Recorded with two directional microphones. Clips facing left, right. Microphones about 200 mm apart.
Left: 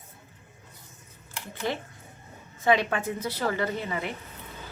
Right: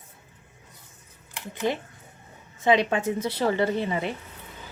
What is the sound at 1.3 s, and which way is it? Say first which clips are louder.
A woman's voice: right 4 dB; 15° right (ahead or behind).